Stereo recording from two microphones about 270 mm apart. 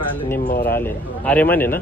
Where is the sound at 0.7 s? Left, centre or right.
Centre.